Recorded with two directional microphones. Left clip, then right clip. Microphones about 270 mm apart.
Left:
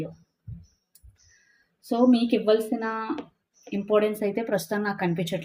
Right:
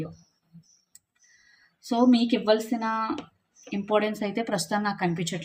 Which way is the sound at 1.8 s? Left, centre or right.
Centre.